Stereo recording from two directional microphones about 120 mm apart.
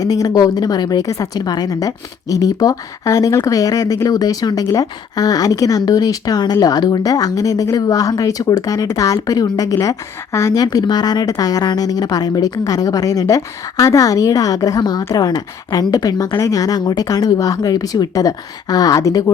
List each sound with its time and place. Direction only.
0.0 s speech: 30° left (ahead or behind)